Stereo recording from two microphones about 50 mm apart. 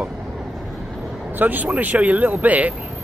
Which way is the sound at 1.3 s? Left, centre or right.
Right.